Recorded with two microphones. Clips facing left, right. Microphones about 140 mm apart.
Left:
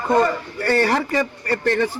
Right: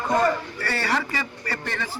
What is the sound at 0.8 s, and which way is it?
Speech, 50° left (ahead or behind).